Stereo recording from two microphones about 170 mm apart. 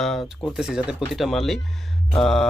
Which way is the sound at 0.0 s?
Centre (ahead or behind).